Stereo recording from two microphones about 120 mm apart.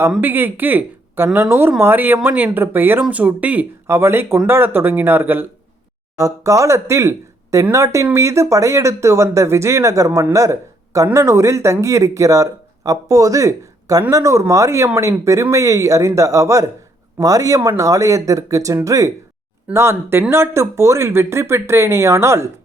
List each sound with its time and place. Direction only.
0.2 s speech: 15° right (ahead or behind)
6.1 s speech: 25° right (ahead or behind)